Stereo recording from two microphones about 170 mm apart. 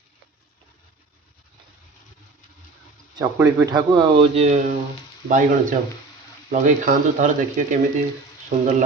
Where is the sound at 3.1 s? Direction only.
20° right (ahead or behind).